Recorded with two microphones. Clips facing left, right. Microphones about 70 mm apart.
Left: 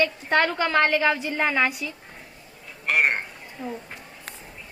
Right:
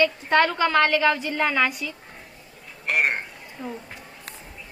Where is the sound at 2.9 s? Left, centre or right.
Centre.